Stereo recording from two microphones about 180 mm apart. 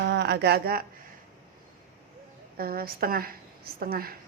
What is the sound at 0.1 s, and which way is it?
Speech, 70° right (ahead or behind).